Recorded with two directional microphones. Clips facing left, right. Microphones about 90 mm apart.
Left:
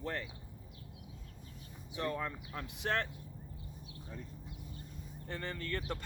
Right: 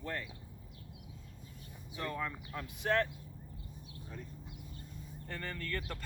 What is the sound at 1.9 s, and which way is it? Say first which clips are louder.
Speech: left 2 dB; 25° left (ahead or behind).